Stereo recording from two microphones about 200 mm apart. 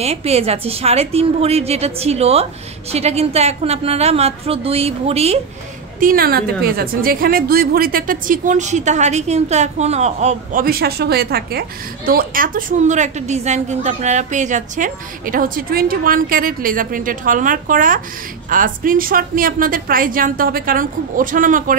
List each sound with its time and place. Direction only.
0.0 s a woman's voice: 30° right (ahead or behind)
5.9 s a woman's voice: 45° right (ahead or behind)